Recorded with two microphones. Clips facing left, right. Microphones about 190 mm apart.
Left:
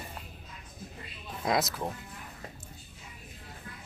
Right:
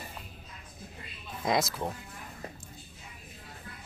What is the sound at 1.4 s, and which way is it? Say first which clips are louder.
Speech: even; centre (ahead or behind).